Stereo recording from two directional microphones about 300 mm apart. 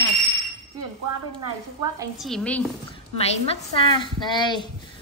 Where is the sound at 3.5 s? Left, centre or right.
Centre.